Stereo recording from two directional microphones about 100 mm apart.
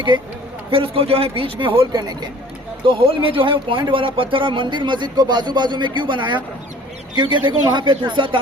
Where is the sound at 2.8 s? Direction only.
55° right (ahead or behind).